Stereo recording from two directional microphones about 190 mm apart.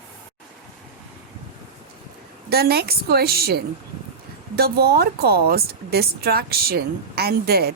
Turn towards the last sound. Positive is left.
turn(degrees=-55)  # may be behind; listen again after turning